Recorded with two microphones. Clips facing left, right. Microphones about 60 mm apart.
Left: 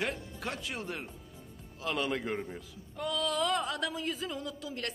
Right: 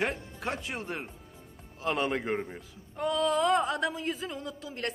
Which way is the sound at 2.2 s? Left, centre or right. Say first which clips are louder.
Right 4 dB; centre.